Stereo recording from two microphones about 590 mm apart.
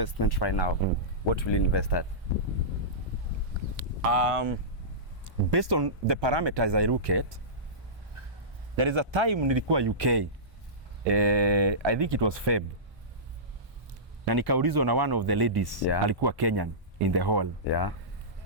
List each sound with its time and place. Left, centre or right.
0.0 s speech: left
4.0 s speech: right
5.5 s speech: right
8.7 s speech: right
14.3 s speech: right
17.7 s speech: left